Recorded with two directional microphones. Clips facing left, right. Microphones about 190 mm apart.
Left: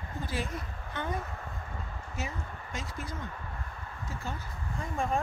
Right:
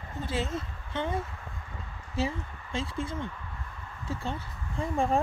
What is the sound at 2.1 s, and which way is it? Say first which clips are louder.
Speech: right 8 dB; 30° right (ahead or behind).